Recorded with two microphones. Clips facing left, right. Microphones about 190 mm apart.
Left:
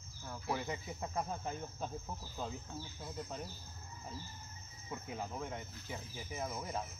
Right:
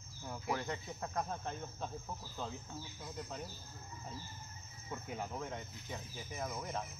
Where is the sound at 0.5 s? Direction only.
10° left (ahead or behind).